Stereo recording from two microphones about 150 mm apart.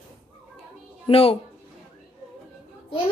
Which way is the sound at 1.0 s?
40° left (ahead or behind).